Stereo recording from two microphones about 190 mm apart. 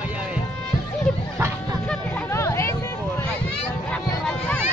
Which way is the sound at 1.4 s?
15° right (ahead or behind).